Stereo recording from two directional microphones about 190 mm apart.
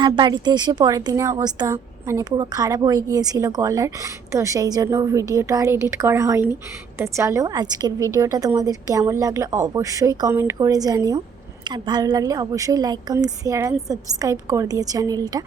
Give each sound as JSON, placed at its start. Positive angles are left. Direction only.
{"t": 0.0, "sound": "a woman's voice", "side_deg": -25}